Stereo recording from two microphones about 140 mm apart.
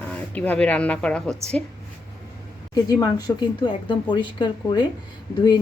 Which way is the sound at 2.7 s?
25° left (ahead or behind).